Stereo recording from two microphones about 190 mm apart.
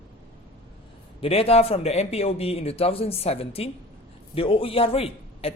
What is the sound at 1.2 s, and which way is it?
A man's voice, 30° left (ahead or behind).